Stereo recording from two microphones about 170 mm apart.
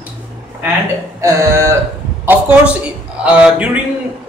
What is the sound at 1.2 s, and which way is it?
A man's voice, 15° right (ahead or behind).